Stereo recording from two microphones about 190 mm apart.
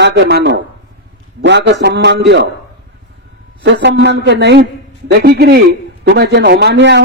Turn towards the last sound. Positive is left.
turn(degrees=-65)  # may be behind; listen again after turning